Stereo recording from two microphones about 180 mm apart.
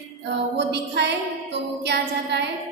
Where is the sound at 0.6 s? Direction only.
70° right (ahead or behind).